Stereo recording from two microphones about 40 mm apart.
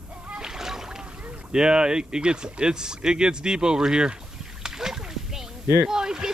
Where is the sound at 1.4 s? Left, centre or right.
Centre.